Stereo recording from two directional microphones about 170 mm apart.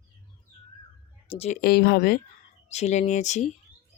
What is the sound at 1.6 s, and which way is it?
Speech, 65° left (ahead or behind).